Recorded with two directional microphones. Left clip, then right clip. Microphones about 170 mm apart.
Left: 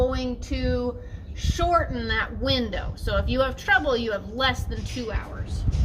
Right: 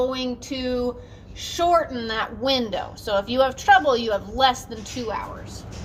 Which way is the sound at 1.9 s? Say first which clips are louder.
Even; 30° left (ahead or behind).